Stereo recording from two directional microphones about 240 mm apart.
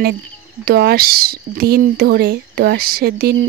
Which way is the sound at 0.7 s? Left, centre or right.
Right.